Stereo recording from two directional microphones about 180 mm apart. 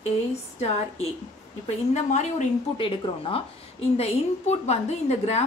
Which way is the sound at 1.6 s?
40° left (ahead or behind).